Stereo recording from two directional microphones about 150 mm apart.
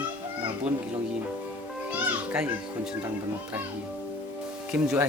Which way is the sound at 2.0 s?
10° right (ahead or behind).